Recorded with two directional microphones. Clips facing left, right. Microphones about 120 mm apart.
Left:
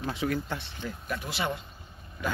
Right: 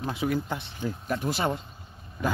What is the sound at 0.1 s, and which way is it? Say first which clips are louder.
Speech: right 3 dB; 15° right (ahead or behind).